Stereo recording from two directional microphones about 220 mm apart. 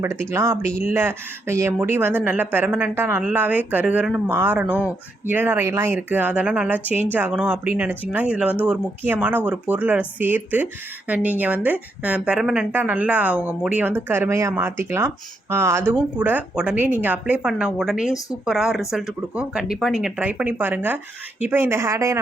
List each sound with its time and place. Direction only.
0.0 s a woman's voice: 10° right (ahead or behind)